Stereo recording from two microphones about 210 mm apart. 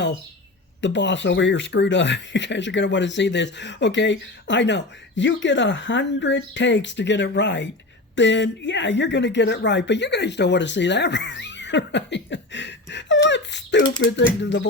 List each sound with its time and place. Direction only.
0.8 s speech: 60° left (ahead or behind)